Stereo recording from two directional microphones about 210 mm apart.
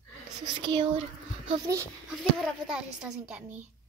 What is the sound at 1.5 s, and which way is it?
Speech, 15° right (ahead or behind).